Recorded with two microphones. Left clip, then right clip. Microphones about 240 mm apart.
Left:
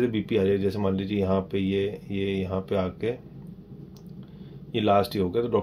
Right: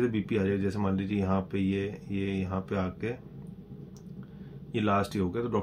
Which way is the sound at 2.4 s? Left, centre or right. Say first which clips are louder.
Left 6 dB; right.